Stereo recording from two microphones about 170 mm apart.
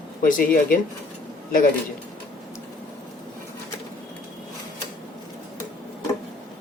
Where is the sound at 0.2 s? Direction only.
55° left (ahead or behind).